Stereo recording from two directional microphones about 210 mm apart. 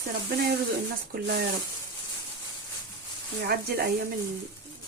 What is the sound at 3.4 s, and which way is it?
Speech, 45° right (ahead or behind).